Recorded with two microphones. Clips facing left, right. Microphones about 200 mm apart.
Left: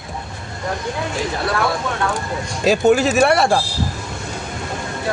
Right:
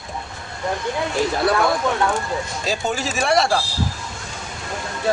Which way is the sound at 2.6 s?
60° left (ahead or behind).